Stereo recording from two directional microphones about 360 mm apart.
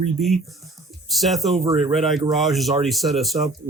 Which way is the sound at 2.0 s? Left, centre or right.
Centre.